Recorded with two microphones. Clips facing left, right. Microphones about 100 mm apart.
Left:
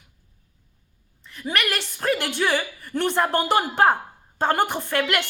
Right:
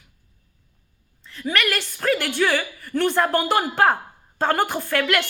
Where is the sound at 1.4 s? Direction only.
20° left (ahead or behind).